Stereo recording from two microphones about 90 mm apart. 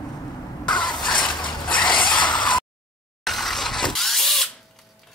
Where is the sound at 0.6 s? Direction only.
55° left (ahead or behind).